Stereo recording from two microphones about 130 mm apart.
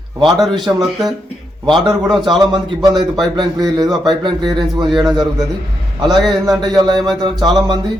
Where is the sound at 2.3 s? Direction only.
30° right (ahead or behind).